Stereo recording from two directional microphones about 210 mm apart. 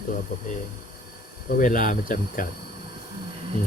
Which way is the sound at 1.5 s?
40° left (ahead or behind).